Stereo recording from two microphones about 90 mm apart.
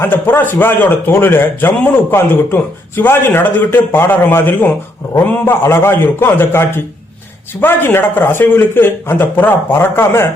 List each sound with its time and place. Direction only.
0.0 s speech: 25° left (ahead or behind)